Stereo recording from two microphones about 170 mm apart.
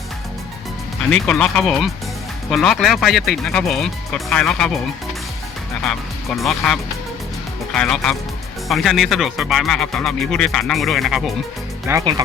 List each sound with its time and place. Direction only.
1.1 s speech: 5° left (ahead or behind)
5.8 s speech: 5° left (ahead or behind)
11.9 s speech: 20° right (ahead or behind)